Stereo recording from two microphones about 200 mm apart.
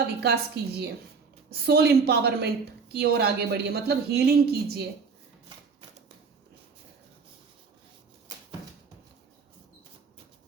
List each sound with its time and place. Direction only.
0.2 s a woman's voice: 55° right (ahead or behind)